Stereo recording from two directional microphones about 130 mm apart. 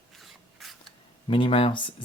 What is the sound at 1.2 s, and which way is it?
Speech, 40° left (ahead or behind).